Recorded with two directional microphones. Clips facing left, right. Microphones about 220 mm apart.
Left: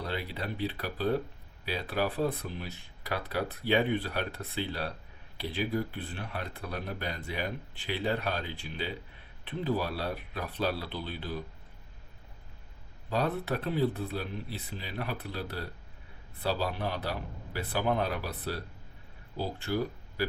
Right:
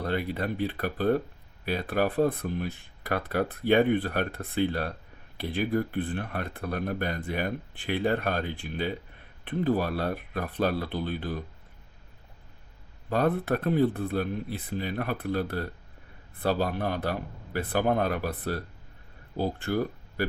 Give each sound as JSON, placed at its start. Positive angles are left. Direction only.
{"t": 0.0, "sound": "speech", "side_deg": -50}
{"t": 13.1, "sound": "speech", "side_deg": -50}